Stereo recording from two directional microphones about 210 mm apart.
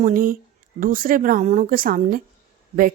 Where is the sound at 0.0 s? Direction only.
40° right (ahead or behind).